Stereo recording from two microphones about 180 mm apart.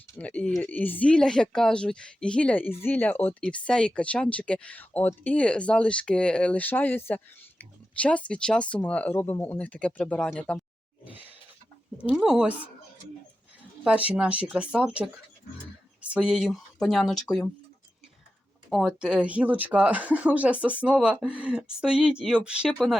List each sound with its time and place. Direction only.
0.2 s speech: 10° left (ahead or behind)
11.0 s a sound: 10° right (ahead or behind)
12.0 s speech: 5° right (ahead or behind)
13.8 s speech: 5° right (ahead or behind)
18.7 s speech: centre (ahead or behind)